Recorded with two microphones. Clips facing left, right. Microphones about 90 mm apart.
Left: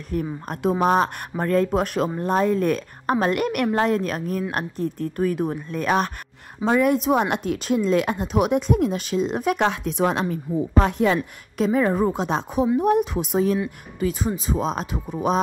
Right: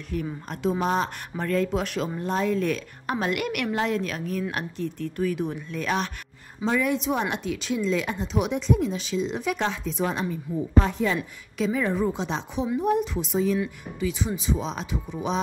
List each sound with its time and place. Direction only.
0.1 s speech: 40° left (ahead or behind)
0.6 s speech: 55° left (ahead or behind)
1.3 s a woman's voice: 40° left (ahead or behind); by 11.1 s 65° left (ahead or behind)
11.5 s a woman's voice: 45° left (ahead or behind)
13.9 s a woman's voice: 45° left (ahead or behind)